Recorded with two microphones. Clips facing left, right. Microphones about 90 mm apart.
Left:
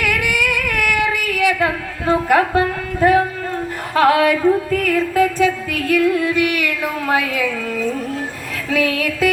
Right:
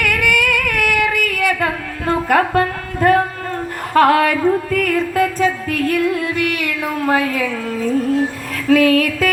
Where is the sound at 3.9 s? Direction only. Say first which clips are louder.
Right 1 dB; 50° right (ahead or behind).